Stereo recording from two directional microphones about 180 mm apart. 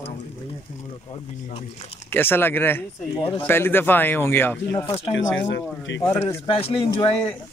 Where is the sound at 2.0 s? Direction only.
10° left (ahead or behind).